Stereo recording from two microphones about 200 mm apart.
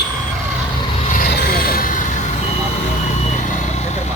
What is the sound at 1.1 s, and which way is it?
Vehicle, 50° left (ahead or behind).